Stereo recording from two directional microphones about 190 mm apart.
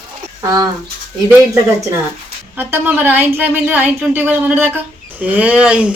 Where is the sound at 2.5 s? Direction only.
10° right (ahead or behind).